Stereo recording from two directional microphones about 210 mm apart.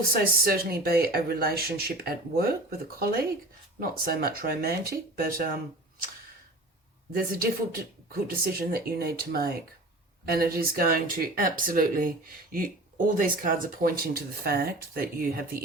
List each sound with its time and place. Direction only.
0.1 s speech: 45° right (ahead or behind)
7.2 s speech: 45° right (ahead or behind)